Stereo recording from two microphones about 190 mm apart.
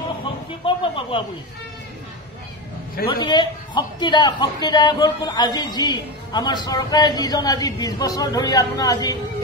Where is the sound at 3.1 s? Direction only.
25° left (ahead or behind).